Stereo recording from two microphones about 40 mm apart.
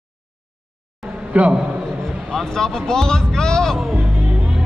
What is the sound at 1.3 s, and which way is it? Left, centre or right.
Speech, right.